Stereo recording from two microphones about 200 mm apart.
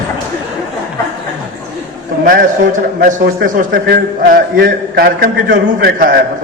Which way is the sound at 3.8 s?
55° right (ahead or behind).